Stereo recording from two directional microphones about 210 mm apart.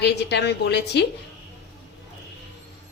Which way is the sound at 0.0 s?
55° left (ahead or behind).